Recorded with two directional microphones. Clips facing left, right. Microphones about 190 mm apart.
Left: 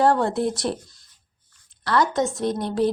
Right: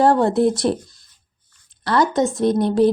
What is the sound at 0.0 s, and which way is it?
Speech, 25° right (ahead or behind).